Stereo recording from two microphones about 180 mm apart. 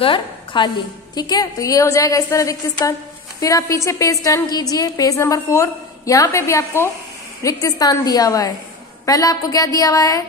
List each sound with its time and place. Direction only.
0.0 s a woman's voice: 30° left (ahead or behind)